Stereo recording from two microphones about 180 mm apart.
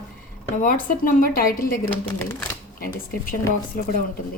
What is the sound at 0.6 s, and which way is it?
Speech, 50° left (ahead or behind).